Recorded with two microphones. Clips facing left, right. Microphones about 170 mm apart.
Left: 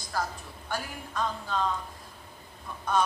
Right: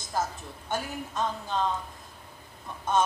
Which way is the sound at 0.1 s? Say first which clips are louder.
Right 2 dB; 20° right (ahead or behind).